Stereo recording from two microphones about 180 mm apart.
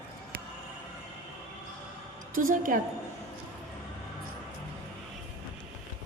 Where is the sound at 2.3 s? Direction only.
50° right (ahead or behind).